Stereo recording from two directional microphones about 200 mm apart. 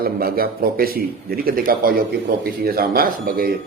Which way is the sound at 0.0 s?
50° right (ahead or behind).